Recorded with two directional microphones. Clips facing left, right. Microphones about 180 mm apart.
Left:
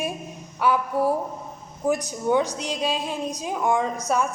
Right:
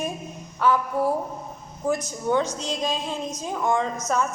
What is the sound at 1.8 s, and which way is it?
A woman's voice, 15° left (ahead or behind).